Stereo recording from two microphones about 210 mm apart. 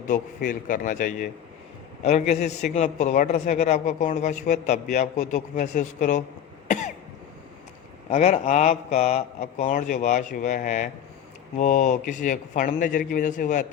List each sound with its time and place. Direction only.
0.1 s a man's voice: 40° left (ahead or behind)
8.1 s a man's voice: 35° left (ahead or behind)